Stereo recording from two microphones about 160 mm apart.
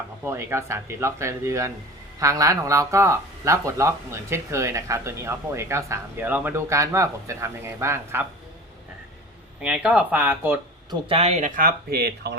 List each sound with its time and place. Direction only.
0.3 s speech: 15° right (ahead or behind)
9.6 s speech: 5° right (ahead or behind)
11.1 s speech: 40° right (ahead or behind); by 12.4 s 85° right